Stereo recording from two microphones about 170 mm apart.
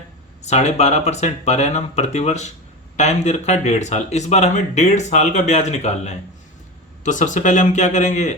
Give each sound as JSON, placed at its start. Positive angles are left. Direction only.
{"t": 0.4, "sound": "speech", "side_deg": 40}